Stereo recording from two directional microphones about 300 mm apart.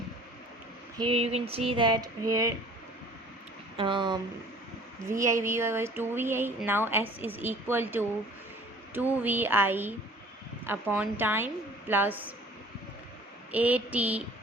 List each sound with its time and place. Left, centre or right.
0.9 s speech: centre
3.8 s speech: centre
13.5 s a sound: centre